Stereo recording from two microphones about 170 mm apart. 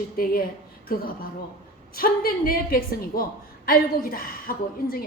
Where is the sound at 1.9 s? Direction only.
60° left (ahead or behind).